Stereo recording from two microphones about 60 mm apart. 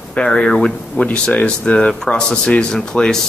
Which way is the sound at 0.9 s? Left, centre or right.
Left.